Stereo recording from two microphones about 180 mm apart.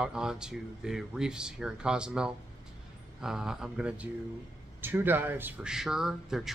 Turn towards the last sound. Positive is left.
turn(degrees=0)  # may be behind; listen again after turning